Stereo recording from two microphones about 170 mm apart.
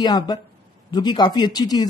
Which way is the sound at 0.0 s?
25° left (ahead or behind).